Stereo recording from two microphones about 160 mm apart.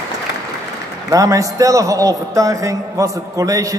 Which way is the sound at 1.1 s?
20° right (ahead or behind).